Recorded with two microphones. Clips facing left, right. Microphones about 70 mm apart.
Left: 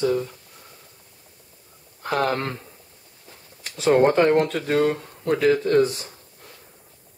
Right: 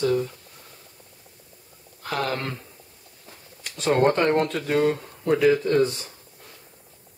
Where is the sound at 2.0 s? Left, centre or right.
Left.